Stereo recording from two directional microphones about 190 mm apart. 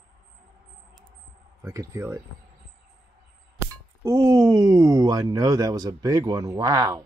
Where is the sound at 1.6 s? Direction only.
15° right (ahead or behind).